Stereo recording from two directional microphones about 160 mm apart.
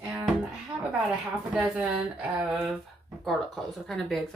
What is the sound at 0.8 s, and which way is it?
Speech, centre (ahead or behind).